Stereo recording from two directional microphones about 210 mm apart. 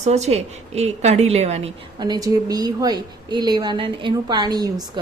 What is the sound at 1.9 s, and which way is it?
A woman's voice, 20° right (ahead or behind).